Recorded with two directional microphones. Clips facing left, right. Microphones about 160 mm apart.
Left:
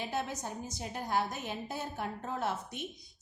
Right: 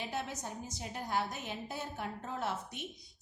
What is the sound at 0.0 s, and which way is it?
A woman's voice, 45° left (ahead or behind).